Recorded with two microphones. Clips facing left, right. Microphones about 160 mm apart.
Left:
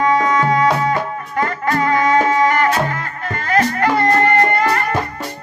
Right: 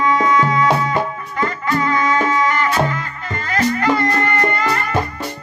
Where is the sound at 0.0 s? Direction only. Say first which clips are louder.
Left 1 dB; 40° left (ahead or behind).